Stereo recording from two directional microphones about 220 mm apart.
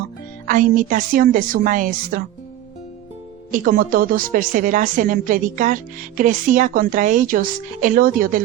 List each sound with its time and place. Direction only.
0.4 s a woman's voice: 40° right (ahead or behind)
3.5 s a woman's voice: 40° right (ahead or behind)